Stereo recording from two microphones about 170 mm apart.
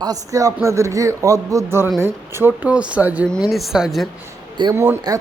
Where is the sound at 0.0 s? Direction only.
20° right (ahead or behind); by 4.1 s centre (ahead or behind).